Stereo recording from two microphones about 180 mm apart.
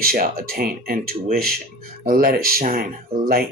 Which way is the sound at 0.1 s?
55° right (ahead or behind).